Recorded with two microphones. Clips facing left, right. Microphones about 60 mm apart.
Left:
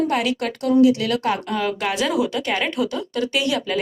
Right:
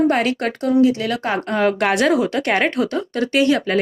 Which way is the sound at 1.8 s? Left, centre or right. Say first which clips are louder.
Right 5 dB; right.